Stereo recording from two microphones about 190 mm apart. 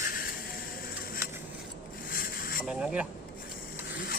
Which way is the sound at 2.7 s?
5° right (ahead or behind).